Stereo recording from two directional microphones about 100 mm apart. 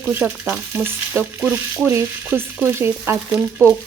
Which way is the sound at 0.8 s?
20° right (ahead or behind).